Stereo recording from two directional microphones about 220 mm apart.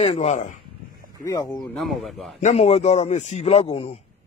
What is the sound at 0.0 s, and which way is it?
Speech, 30° left (ahead or behind).